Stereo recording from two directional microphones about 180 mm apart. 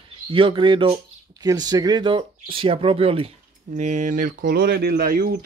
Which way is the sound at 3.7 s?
45° right (ahead or behind).